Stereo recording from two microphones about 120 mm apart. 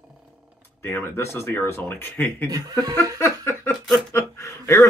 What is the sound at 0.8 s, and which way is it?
Speech, 20° left (ahead or behind).